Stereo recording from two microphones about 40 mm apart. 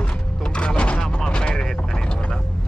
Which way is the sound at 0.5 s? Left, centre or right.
Left.